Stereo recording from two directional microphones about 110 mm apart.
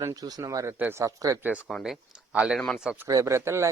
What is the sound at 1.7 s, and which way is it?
Speech, centre (ahead or behind).